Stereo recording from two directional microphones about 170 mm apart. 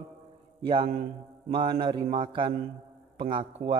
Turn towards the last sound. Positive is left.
turn(degrees=-30)  # may be behind; listen again after turning